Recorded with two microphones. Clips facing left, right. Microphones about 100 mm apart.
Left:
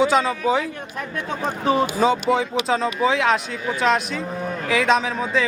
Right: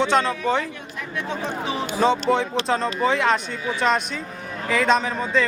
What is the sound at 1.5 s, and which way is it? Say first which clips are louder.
Speech: left 10 dB; 45° left (ahead or behind).